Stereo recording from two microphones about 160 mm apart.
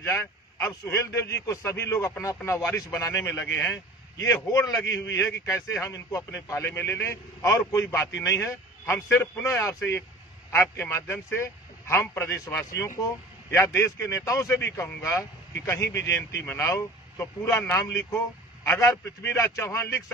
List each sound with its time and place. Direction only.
0.0 s a man's voice: 15° left (ahead or behind)